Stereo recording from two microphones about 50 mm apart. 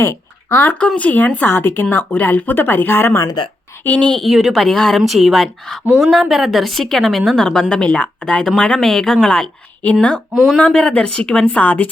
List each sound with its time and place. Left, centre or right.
0.5 s speech: left
0.9 s speech: left
1.5 s speech: left
3.8 s speech: left
4.3 s a woman's voice: centre
4.9 s a woman's voice: centre
9.8 s speech: left